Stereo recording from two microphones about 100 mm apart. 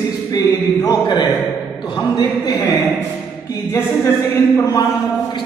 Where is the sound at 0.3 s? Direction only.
35° left (ahead or behind).